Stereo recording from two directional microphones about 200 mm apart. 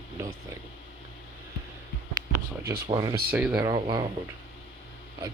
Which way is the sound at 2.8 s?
20° right (ahead or behind).